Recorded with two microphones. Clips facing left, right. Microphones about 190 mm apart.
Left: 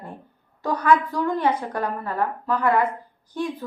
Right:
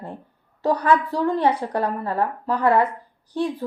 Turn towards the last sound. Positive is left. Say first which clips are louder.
# right 3 dB
turn(degrees=-35)  # may be behind; listen again after turning